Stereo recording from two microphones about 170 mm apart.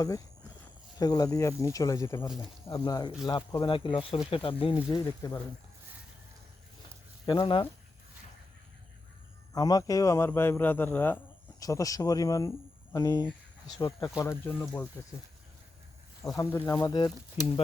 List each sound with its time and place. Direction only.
0.9 s speech: 20° left (ahead or behind)
7.3 s speech: 30° left (ahead or behind)
9.5 s speech: 20° left (ahead or behind)
16.2 s speech: 20° left (ahead or behind)